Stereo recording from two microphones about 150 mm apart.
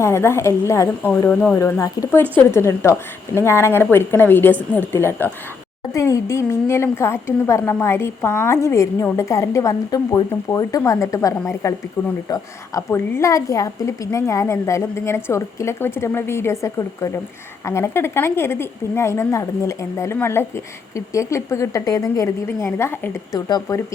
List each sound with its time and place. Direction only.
0.0 s a woman's voice: 15° left (ahead or behind)
1.3 s a woman's voice: 10° left (ahead or behind)
1.5 s a woman's voice: 20° left (ahead or behind)